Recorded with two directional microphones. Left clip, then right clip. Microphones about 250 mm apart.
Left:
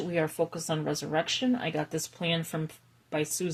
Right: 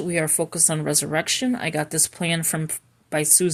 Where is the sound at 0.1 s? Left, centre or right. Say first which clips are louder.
Right 4 dB; right.